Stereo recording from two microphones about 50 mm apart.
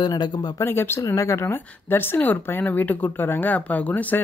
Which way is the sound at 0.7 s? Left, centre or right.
Left.